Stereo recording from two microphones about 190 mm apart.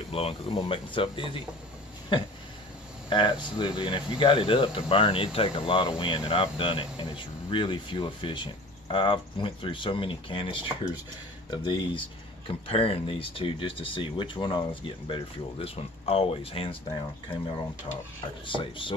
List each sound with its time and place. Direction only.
0.1 s speech: 30° left (ahead or behind)
3.1 s speech: 25° left (ahead or behind)